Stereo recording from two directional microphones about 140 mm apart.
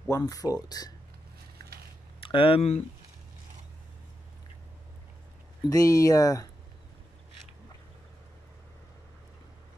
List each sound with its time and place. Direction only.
0.1 s speech: 25° left (ahead or behind)
2.1 s speech: 40° left (ahead or behind)
5.7 s speech: 25° left (ahead or behind)